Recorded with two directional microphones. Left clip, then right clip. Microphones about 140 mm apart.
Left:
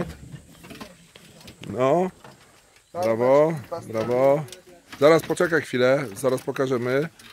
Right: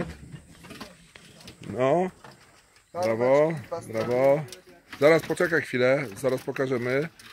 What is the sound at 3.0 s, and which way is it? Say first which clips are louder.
Speech: left 3 dB; 15° left (ahead or behind).